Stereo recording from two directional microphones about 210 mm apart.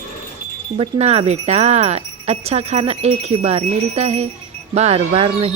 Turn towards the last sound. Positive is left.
turn(degrees=-25)  # may be behind; listen again after turning